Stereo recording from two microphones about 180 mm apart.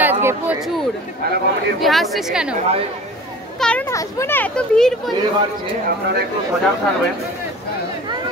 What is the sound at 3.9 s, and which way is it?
A child's voice, 15° left (ahead or behind).